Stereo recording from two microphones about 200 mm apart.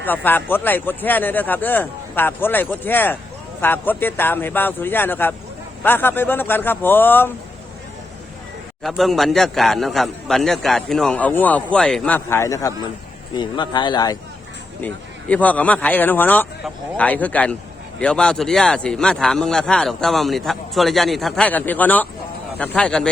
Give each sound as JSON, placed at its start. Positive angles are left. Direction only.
{"t": 0.0, "sound": "speech", "side_deg": 10}
{"t": 8.8, "sound": "speech", "side_deg": 0}
{"t": 14.8, "sound": "speech", "side_deg": 10}